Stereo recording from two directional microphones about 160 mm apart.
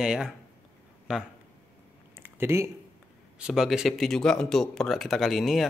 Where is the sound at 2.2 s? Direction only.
15° right (ahead or behind).